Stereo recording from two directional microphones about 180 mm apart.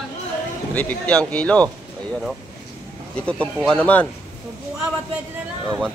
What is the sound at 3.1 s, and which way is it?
Speech, 5° left (ahead or behind).